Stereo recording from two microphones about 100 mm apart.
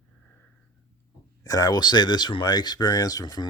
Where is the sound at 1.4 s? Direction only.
35° left (ahead or behind).